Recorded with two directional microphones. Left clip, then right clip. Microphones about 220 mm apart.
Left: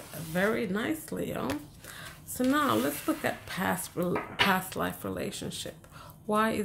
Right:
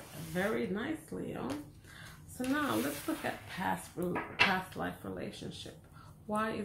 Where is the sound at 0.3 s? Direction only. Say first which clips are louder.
Left 6 dB; 50° left (ahead or behind).